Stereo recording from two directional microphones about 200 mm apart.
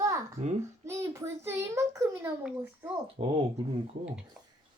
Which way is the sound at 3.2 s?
25° right (ahead or behind).